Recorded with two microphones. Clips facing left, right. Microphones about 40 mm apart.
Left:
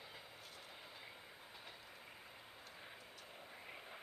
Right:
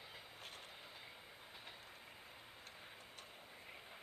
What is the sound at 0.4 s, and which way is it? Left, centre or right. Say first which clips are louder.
Train: right 2 dB; right.